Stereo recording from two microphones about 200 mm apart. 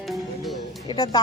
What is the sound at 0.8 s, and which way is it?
Speech, 20° left (ahead or behind).